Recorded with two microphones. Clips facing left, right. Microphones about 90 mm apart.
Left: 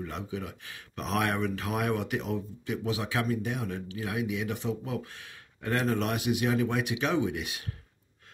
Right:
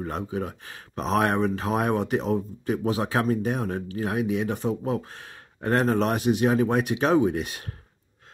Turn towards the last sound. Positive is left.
turn(degrees=-40)  # may be behind; listen again after turning